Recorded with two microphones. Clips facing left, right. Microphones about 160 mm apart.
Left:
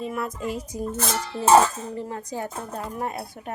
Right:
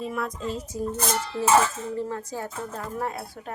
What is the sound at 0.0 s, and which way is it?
Speech, centre (ahead or behind).